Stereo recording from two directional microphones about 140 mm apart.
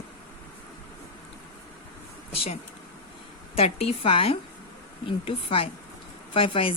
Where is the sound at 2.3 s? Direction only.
45° left (ahead or behind).